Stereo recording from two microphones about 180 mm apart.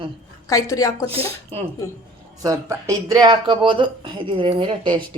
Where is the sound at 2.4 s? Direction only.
15° right (ahead or behind).